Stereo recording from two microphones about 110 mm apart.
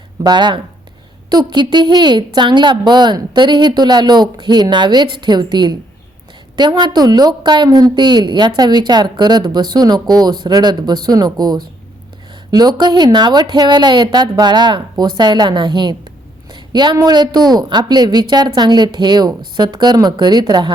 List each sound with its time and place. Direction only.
0.2 s a woman's voice: 45° right (ahead or behind)